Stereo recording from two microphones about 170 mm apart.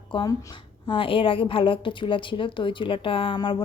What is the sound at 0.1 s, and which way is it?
A woman's voice, 25° left (ahead or behind).